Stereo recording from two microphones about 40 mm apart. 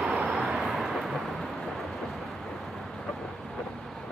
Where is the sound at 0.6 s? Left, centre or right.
Centre.